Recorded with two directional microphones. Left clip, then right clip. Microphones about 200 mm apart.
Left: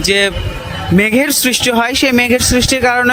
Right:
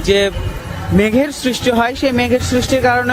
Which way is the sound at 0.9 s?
20° left (ahead or behind).